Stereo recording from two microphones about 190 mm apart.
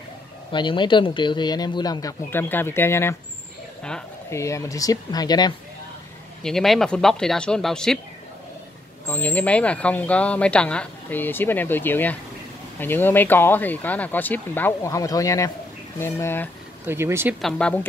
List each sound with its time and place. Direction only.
0.5 s speech: 25° left (ahead or behind)
4.3 s speech: 15° left (ahead or behind)
6.4 s speech: centre (ahead or behind)
9.0 s speech: 10° left (ahead or behind)
16.8 s speech: 15° right (ahead or behind)
17.4 s speech: 5° left (ahead or behind)